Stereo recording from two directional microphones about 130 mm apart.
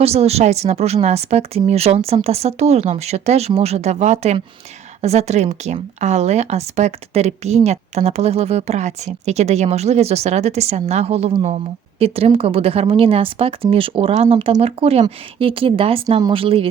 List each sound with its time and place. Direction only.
0.0 s speech: 50° right (ahead or behind)